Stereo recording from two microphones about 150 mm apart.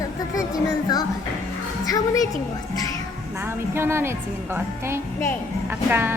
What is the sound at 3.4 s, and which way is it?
A woman's voice, 15° right (ahead or behind).